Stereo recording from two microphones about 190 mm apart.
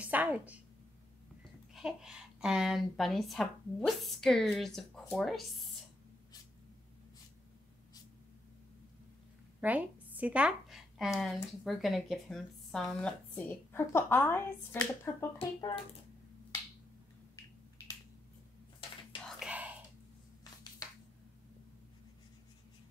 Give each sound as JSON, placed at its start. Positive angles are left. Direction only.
{"t": 0.0, "sound": "a sound", "side_deg": -10}
{"t": 1.7, "sound": "speech", "side_deg": -5}
{"t": 9.6, "sound": "speech", "side_deg": -10}
{"t": 15.3, "sound": "speech", "side_deg": 25}
{"t": 19.2, "sound": "whispering", "side_deg": -5}